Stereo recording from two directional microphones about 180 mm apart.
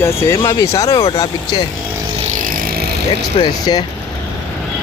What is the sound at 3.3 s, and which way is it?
Speech, 25° left (ahead or behind).